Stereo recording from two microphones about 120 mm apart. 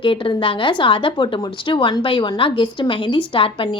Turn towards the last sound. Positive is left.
turn(degrees=45)  # may be behind; listen again after turning